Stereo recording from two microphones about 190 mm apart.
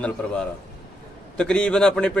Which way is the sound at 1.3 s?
5° left (ahead or behind).